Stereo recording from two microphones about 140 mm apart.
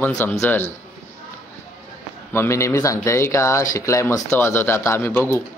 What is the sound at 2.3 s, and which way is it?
Speech, 20° left (ahead or behind).